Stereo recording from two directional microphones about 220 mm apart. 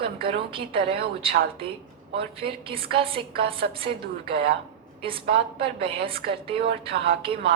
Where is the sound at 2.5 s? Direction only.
25° right (ahead or behind).